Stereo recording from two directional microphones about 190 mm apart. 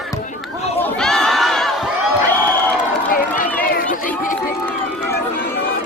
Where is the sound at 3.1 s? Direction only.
45° left (ahead or behind).